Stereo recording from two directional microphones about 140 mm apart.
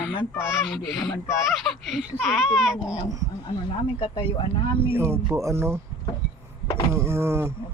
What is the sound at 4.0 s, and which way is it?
Speech, 40° left (ahead or behind).